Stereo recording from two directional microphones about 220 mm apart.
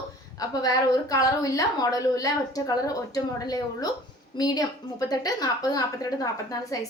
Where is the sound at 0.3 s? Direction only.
15° left (ahead or behind).